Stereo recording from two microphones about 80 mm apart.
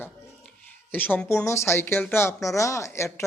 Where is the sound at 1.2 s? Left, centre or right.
Left.